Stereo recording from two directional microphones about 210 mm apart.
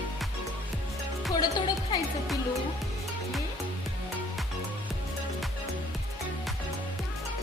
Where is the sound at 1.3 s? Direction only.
20° left (ahead or behind).